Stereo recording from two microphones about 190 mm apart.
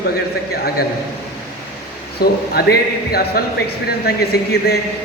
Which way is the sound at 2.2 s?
55° left (ahead or behind).